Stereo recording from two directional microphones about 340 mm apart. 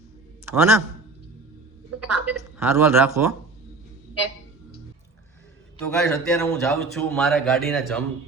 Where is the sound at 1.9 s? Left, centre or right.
Right.